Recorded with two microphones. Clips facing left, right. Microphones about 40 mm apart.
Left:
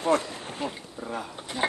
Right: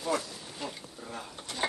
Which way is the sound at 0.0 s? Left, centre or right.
Left.